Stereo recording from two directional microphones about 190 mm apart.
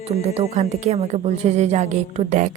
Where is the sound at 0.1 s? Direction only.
35° right (ahead or behind).